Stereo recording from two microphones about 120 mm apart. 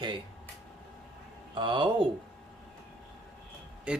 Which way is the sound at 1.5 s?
40° right (ahead or behind).